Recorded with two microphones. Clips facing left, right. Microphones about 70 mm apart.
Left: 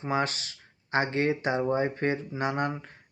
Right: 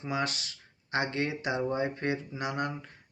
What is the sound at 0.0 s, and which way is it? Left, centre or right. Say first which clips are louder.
Speech: left 4 dB; left.